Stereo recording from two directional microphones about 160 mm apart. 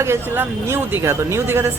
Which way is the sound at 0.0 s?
15° right (ahead or behind).